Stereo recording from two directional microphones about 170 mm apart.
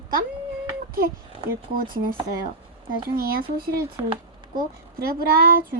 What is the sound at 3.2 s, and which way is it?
Speech, 60° right (ahead or behind).